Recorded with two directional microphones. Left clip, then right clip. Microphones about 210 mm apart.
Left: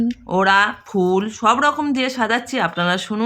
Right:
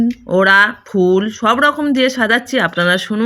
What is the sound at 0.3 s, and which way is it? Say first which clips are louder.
Speech: right 5 dB; 10° right (ahead or behind).